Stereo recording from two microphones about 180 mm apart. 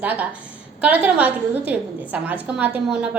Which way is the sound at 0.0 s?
10° right (ahead or behind).